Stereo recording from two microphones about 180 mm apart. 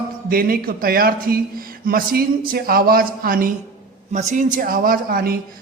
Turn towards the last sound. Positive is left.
turn(degrees=-55)  # may be behind; listen again after turning